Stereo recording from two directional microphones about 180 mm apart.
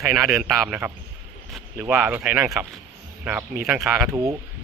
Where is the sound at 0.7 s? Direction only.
10° right (ahead or behind).